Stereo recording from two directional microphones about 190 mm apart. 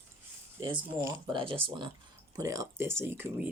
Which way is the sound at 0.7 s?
15° right (ahead or behind).